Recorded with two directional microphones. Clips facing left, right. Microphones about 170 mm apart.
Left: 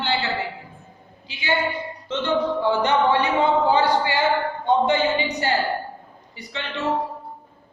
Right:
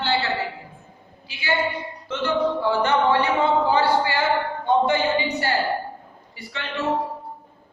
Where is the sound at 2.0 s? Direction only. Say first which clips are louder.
Even; 20° left (ahead or behind).